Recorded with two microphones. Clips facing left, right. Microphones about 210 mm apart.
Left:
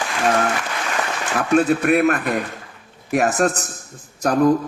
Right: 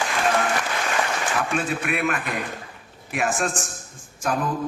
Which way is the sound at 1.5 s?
40° left (ahead or behind).